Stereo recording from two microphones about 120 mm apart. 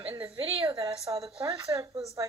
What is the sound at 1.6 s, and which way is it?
Speech, 25° right (ahead or behind).